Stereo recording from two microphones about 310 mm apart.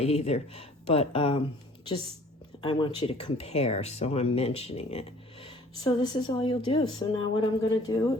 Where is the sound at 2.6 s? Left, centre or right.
Centre.